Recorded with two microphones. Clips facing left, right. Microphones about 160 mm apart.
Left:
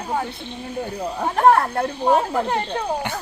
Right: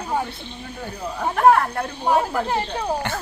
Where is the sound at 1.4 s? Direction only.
35° left (ahead or behind).